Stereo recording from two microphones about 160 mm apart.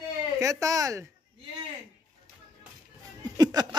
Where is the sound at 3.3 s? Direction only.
25° right (ahead or behind).